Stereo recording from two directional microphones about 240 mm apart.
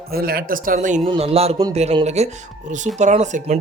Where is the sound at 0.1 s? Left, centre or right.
Right.